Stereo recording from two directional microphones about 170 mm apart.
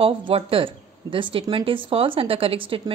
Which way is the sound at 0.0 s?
35° right (ahead or behind).